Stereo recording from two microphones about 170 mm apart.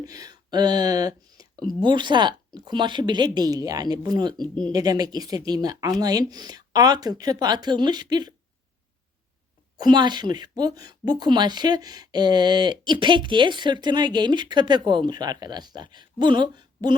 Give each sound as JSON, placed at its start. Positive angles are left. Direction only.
{"t": 0.0, "sound": "speech", "side_deg": -20}
{"t": 9.7, "sound": "speech", "side_deg": -25}